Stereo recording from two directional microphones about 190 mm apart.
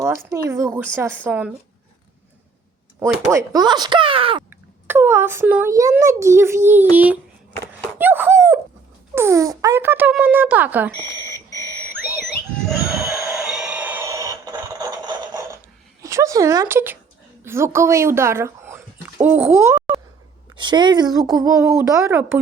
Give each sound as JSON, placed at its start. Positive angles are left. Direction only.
{"t": 0.0, "sound": "speech", "side_deg": -15}
{"t": 3.0, "sound": "speech", "side_deg": -15}
{"t": 4.4, "sound": "a child's voice", "side_deg": -10}
{"t": 11.0, "sound": "speech", "side_deg": 15}
{"t": 12.8, "sound": "a sound", "side_deg": -5}
{"t": 16.0, "sound": "speech", "side_deg": -15}
{"t": 20.6, "sound": "speech", "side_deg": -25}